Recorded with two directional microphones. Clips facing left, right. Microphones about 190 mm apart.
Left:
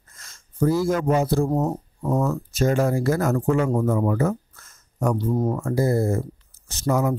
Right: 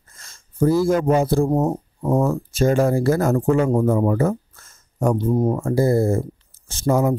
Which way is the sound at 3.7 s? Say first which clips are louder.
Right 4 dB; 30° right (ahead or behind).